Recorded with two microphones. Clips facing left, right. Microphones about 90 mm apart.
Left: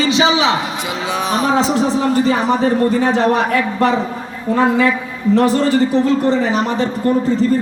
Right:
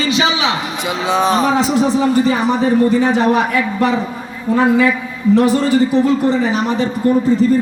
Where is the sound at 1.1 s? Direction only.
35° right (ahead or behind).